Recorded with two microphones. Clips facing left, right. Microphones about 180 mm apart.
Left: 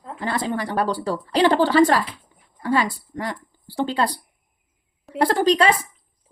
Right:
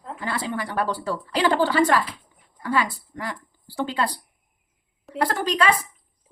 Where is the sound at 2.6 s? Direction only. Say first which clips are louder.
Left 3 dB; 35° left (ahead or behind).